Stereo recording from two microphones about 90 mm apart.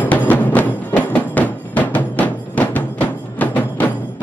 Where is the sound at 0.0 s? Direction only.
20° left (ahead or behind).